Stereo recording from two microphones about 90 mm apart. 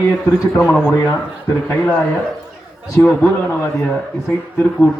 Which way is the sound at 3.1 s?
25° left (ahead or behind).